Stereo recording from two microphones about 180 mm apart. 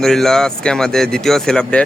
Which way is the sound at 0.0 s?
Centre (ahead or behind).